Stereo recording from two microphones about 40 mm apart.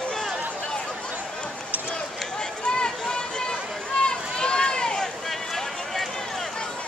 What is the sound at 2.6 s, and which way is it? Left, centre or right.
Run, left.